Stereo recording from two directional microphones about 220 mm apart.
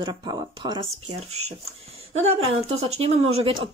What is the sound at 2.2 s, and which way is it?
Speech, 30° right (ahead or behind).